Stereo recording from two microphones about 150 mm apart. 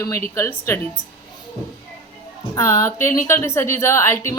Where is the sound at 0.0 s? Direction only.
20° left (ahead or behind).